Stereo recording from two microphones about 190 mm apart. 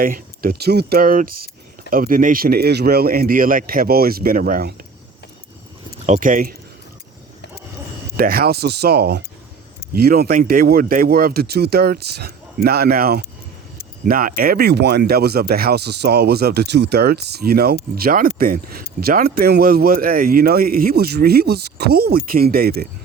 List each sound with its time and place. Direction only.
0.0 s speech: 50° right (ahead or behind)
6.1 s speech: 45° right (ahead or behind)
8.1 s speech: 50° right (ahead or behind)